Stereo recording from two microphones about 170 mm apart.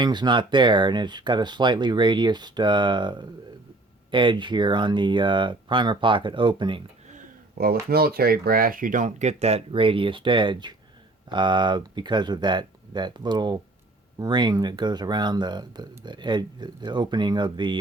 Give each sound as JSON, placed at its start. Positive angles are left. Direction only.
{"t": 0.0, "sound": "speech", "side_deg": -25}
{"t": 7.6, "sound": "speech", "side_deg": -65}